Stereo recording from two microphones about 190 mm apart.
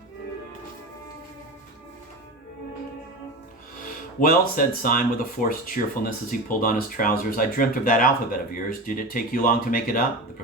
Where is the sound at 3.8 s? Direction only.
50° left (ahead or behind).